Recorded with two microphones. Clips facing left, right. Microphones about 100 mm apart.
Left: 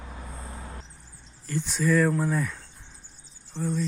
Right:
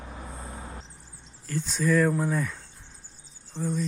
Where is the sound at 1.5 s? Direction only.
Centre (ahead or behind).